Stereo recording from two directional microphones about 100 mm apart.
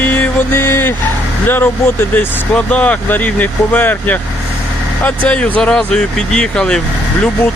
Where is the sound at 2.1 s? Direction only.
15° left (ahead or behind).